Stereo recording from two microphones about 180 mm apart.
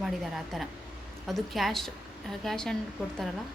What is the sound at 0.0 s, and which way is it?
Speech, centre (ahead or behind).